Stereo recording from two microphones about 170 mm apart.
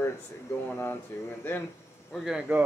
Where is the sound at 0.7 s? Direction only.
10° left (ahead or behind).